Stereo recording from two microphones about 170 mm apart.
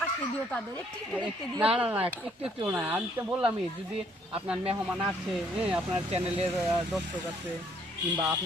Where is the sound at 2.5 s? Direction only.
5° right (ahead or behind).